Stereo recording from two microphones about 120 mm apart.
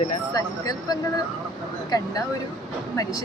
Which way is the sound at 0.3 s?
30° left (ahead or behind).